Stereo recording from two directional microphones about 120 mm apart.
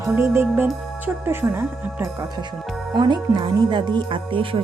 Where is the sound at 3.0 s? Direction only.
35° right (ahead or behind).